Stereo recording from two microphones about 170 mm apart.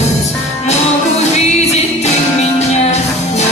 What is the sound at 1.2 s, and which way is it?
Music, 40° left (ahead or behind).